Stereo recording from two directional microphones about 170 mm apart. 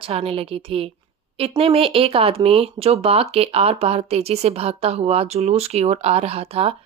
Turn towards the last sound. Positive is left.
turn(degrees=-35)  # may be behind; listen again after turning